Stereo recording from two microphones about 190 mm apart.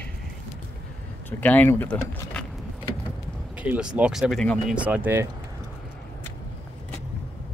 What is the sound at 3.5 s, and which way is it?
Speech, 5° right (ahead or behind).